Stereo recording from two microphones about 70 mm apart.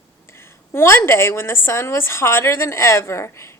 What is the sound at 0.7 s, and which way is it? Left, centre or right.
A woman's voice, left.